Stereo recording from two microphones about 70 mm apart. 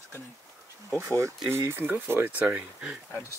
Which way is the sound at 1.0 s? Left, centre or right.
Right.